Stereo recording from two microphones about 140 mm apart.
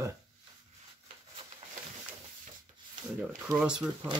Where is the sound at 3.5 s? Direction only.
5° right (ahead or behind).